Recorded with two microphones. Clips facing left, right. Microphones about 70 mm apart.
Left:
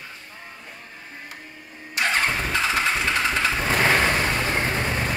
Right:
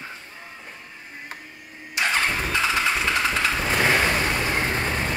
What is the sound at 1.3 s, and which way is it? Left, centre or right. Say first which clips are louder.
Printer: right 2 dB; right.